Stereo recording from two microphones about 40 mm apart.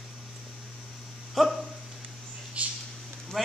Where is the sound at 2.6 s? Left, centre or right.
Right.